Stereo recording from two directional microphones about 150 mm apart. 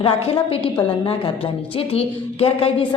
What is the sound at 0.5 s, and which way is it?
A woman's voice, 35° left (ahead or behind).